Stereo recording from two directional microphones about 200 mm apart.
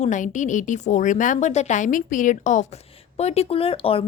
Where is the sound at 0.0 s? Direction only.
40° left (ahead or behind).